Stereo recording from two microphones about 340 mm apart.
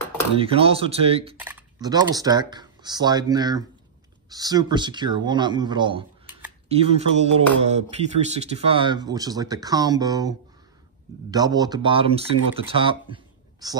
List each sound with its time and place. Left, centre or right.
0.4 s speech: centre